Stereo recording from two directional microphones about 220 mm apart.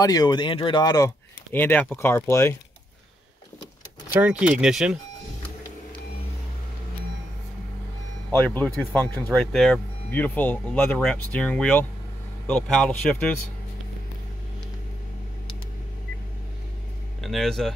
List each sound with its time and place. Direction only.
0.0 s speech: 15° left (ahead or behind)
4.1 s speech: 5° right (ahead or behind)
8.3 s speech: 5° left (ahead or behind)
17.2 s speech: centre (ahead or behind)